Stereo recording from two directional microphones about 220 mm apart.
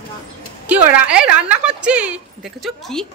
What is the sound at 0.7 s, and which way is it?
A woman's voice, 5° right (ahead or behind).